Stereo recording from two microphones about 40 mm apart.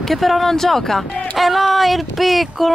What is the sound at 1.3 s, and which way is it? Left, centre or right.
Speech, centre.